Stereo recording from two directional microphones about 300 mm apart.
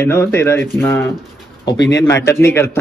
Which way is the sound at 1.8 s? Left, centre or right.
Left.